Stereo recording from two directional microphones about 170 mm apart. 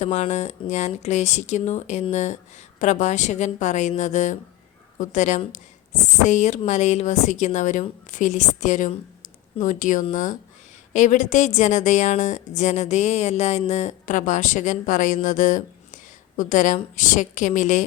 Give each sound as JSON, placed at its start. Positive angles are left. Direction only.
{"t": 0.0, "sound": "a woman's voice", "side_deg": 40}